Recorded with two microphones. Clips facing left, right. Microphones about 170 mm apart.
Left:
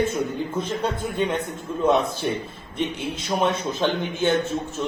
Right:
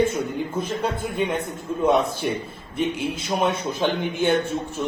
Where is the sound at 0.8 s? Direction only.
10° right (ahead or behind).